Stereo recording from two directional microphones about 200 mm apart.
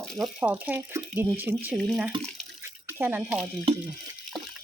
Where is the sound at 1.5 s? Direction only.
Centre (ahead or behind).